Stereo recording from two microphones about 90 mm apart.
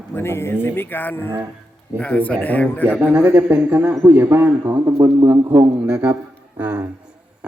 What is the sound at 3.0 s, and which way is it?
A man's voice, 15° right (ahead or behind).